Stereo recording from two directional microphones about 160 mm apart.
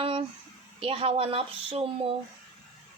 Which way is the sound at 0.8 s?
35° right (ahead or behind).